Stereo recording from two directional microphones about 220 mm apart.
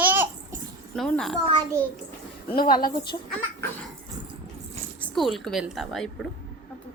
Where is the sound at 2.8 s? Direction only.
45° left (ahead or behind).